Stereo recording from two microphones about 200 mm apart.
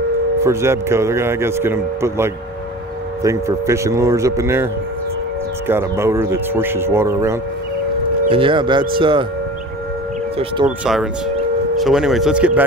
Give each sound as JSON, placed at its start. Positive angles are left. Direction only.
{"t": 0.4, "sound": "speech", "side_deg": -15}
{"t": 5.7, "sound": "speech", "side_deg": -10}
{"t": 8.3, "sound": "speech", "side_deg": -25}
{"t": 10.6, "sound": "speech", "side_deg": -20}
{"t": 11.7, "sound": "speech", "side_deg": 0}